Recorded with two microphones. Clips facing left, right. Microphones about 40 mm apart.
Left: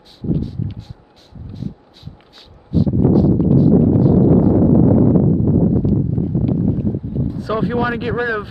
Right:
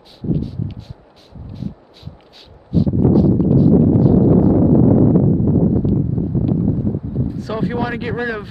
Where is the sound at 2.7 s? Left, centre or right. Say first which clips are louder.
Even; centre.